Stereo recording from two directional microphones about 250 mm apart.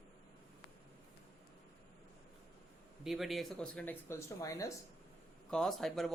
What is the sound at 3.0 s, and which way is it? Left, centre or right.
Speech, centre.